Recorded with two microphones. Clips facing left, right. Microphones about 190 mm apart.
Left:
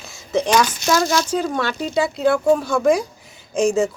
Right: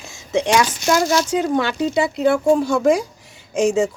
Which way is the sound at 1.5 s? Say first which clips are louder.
Right 3 dB; 15° right (ahead or behind).